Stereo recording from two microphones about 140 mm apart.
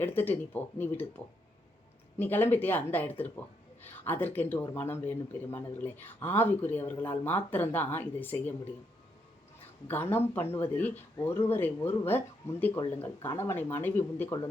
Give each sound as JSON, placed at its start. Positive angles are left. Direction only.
{"t": 0.0, "sound": "speech", "side_deg": 15}
{"t": 9.8, "sound": "speech", "side_deg": 15}